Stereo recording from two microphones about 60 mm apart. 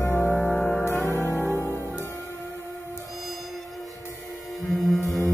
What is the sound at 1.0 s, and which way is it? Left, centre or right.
Music, left.